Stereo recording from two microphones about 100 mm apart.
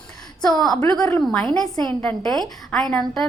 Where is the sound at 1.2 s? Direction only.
5° left (ahead or behind).